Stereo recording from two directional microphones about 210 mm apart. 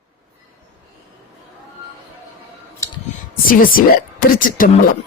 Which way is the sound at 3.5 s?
45° left (ahead or behind).